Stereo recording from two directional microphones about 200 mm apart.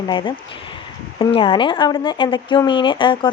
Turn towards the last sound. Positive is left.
turn(degrees=25)  # may be behind; listen again after turning